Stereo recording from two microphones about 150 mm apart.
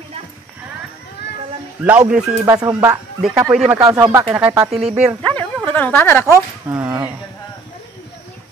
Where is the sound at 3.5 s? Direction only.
Centre (ahead or behind).